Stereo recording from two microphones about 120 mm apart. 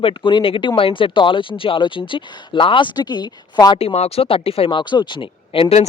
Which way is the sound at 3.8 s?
55° left (ahead or behind).